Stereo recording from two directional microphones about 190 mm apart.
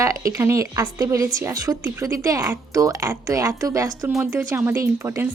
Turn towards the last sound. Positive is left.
turn(degrees=-15)  # may be behind; listen again after turning